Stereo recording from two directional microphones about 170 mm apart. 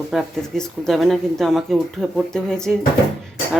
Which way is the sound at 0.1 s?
Centre (ahead or behind).